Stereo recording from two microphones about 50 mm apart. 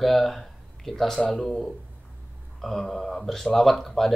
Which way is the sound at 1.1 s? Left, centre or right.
Centre.